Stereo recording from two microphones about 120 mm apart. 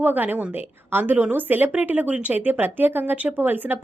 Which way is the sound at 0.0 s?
15° right (ahead or behind).